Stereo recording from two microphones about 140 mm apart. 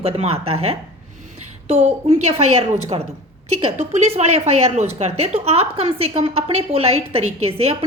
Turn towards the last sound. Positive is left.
turn(degrees=-45)  # may be behind; listen again after turning